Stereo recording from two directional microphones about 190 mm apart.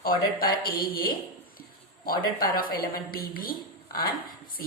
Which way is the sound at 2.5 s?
50° left (ahead or behind).